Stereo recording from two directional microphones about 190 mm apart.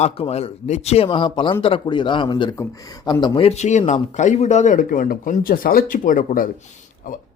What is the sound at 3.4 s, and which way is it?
A man's voice, 35° left (ahead or behind).